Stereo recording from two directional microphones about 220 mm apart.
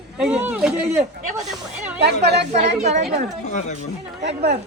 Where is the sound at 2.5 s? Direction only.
30° right (ahead or behind).